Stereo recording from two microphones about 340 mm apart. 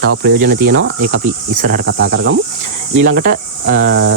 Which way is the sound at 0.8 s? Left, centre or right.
Right.